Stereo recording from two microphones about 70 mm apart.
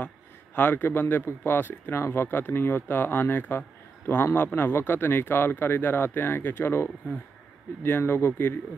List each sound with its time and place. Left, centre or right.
0.6 s speech: left